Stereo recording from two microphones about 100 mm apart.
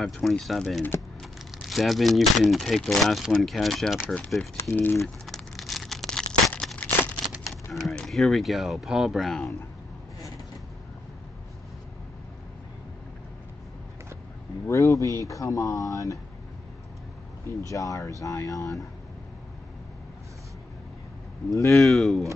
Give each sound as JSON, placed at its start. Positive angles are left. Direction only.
{"t": 0.0, "sound": "speech", "side_deg": 0}
{"t": 4.0, "sound": "speech", "side_deg": 15}
{"t": 5.0, "sound": "crumpling", "side_deg": 0}
{"t": 7.7, "sound": "speech", "side_deg": 0}
{"t": 14.7, "sound": "speech", "side_deg": 30}
{"t": 17.5, "sound": "speech", "side_deg": 30}
{"t": 21.5, "sound": "speech", "side_deg": 30}
{"t": 21.7, "sound": "speech", "side_deg": 0}